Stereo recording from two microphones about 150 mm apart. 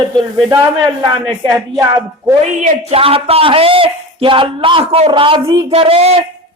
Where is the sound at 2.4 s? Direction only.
50° right (ahead or behind).